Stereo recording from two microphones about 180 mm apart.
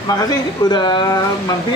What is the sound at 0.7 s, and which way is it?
Speech, 25° left (ahead or behind).